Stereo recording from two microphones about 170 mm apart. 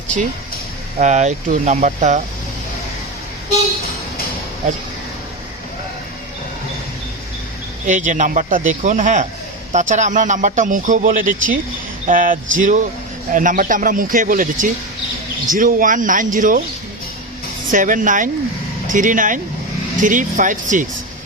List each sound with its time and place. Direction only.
0.9 s speech: 45° right (ahead or behind)
7.9 s speech: 45° right (ahead or behind)
17.7 s speech: 50° right (ahead or behind)